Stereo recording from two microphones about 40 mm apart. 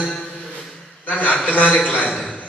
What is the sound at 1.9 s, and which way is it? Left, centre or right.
Speech, left.